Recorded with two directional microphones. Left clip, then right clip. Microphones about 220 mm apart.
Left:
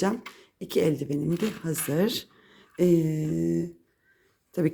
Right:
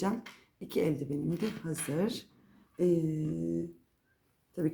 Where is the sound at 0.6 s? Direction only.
35° left (ahead or behind).